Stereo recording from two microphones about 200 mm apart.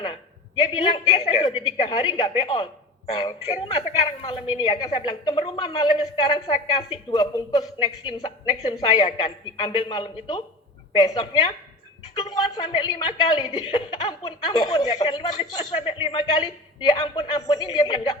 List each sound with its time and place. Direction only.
0.8 s speech: 25° left (ahead or behind)